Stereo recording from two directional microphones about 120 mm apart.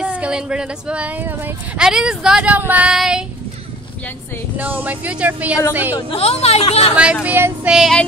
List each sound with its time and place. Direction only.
0.0 s speech: 10° right (ahead or behind)
4.6 s speech: 15° right (ahead or behind)
6.1 s speech: 55° left (ahead or behind)
7.2 s speech: 15° right (ahead or behind)
7.7 s child singing: centre (ahead or behind)